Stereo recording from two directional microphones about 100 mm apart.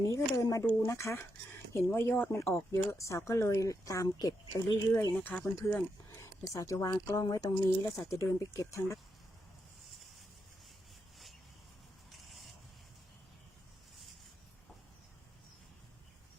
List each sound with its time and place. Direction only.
0.0 s a woman's voice: 35° left (ahead or behind)
3.0 s a woman's voice: 30° left (ahead or behind)
5.4 s speech: 20° left (ahead or behind)
6.2 s a woman's voice: 35° left (ahead or behind)